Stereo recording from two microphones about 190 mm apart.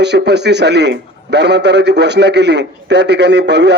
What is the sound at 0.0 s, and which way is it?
A man's voice, 65° right (ahead or behind).